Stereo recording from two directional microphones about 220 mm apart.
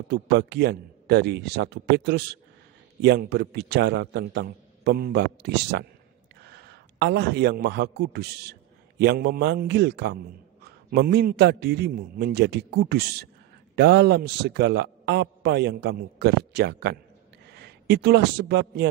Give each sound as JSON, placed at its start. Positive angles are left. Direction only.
{"t": 0.1, "sound": "a man's voice", "side_deg": -50}